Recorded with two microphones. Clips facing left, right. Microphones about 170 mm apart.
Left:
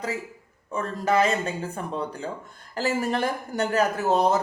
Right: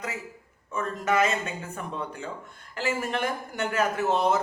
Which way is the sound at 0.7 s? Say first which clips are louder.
Left 2 dB; 35° left (ahead or behind).